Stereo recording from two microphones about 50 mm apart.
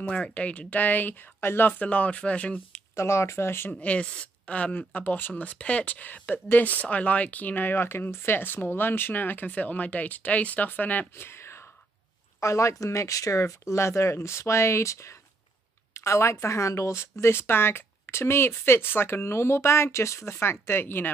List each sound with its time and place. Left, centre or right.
0.1 s speech: left
1.4 s speech: left
1.7 s speech: left
3.0 s speech: left
3.8 s speech: left
5.3 s speech: left
11.2 s whispering: left
12.4 s speech: left
20.3 s speech: left